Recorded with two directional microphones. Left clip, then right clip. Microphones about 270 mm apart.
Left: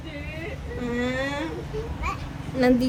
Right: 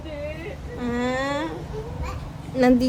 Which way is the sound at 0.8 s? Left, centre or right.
Centre.